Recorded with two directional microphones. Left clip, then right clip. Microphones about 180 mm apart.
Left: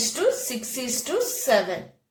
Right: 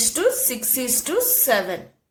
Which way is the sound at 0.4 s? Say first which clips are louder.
Right 4 dB; 40° right (ahead or behind).